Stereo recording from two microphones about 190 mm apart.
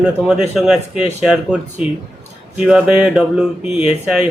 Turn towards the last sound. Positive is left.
turn(degrees=-5)  # may be behind; listen again after turning